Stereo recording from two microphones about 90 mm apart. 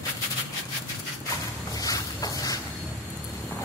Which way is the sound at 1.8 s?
40° left (ahead or behind).